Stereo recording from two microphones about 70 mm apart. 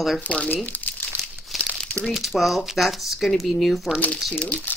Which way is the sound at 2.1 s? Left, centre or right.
Centre.